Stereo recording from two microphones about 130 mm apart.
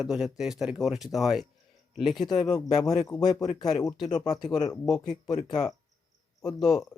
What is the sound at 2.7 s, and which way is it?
Speech, 30° left (ahead or behind).